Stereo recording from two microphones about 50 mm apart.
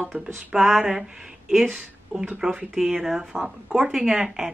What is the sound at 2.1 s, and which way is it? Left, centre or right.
Speech, right.